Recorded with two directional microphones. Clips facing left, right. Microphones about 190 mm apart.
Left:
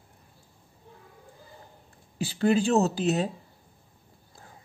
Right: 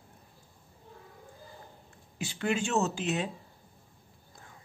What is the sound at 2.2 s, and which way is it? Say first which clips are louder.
Speech: left 7 dB; 35° left (ahead or behind).